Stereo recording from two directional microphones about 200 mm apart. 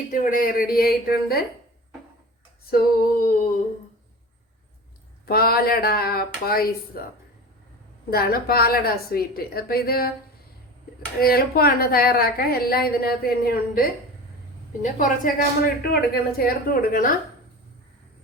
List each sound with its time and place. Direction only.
0.1 s a woman's voice: 45° left (ahead or behind)
2.6 s a woman's voice: 50° left (ahead or behind)
5.2 s a woman's voice: 50° left (ahead or behind)
8.1 s a woman's voice: 50° left (ahead or behind)
11.2 s a woman's voice: 50° left (ahead or behind)